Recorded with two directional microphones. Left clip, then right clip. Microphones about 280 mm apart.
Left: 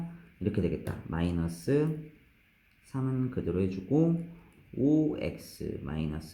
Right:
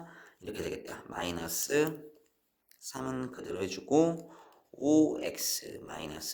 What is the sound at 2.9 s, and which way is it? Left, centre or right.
Speech, right.